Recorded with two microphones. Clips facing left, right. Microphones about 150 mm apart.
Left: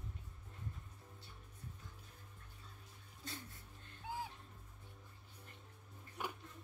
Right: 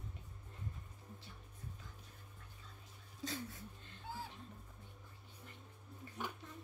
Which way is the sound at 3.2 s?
90° right.